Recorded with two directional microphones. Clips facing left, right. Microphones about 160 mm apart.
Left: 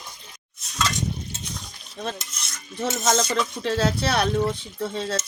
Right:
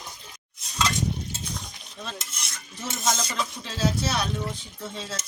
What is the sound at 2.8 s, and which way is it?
Speech, 55° left (ahead or behind).